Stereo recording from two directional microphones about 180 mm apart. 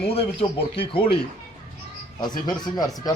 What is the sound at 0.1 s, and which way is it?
Speech, 30° left (ahead or behind).